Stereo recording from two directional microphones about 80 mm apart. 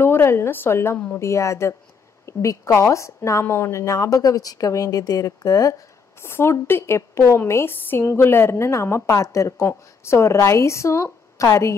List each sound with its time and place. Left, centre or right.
0.0 s a woman's voice: left
0.9 s speech: centre
1.2 s a woman's voice: left
6.2 s a woman's voice: left